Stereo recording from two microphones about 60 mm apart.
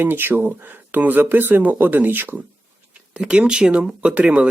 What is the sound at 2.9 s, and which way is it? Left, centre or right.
Speech, centre.